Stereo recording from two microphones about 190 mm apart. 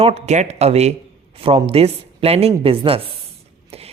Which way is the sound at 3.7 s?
30° right (ahead or behind).